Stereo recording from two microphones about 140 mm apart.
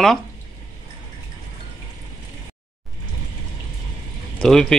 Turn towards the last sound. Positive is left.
turn(degrees=5)  # may be behind; listen again after turning